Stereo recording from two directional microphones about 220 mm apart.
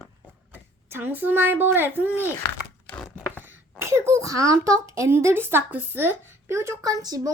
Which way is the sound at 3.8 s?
10° right (ahead or behind).